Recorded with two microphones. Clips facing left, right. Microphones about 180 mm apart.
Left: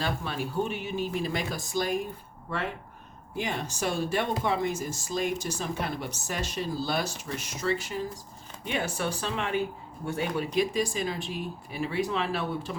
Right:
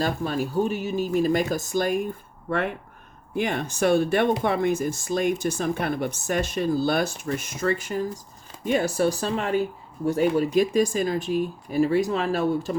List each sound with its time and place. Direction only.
0.0 s speech: 40° right (ahead or behind)
3.3 s speech: 55° right (ahead or behind)